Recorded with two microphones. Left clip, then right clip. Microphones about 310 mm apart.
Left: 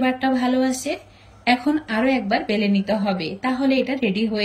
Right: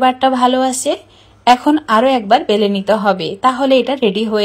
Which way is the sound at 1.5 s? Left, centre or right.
Right.